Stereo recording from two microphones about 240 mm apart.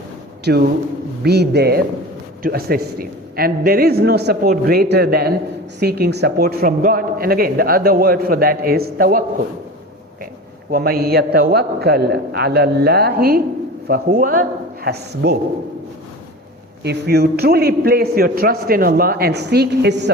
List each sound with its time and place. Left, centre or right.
0.5 s a man's voice: right
10.7 s a man's voice: right
16.8 s a man's voice: right